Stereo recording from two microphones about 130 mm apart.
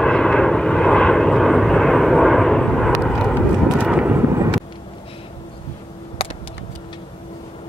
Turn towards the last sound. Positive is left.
turn(degrees=45)  # may be behind; listen again after turning